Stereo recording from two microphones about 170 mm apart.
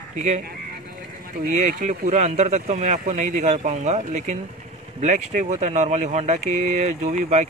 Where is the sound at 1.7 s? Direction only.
45° right (ahead or behind).